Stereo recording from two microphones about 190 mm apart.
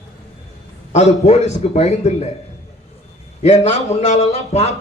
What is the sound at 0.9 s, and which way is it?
A man's voice, 35° left (ahead or behind).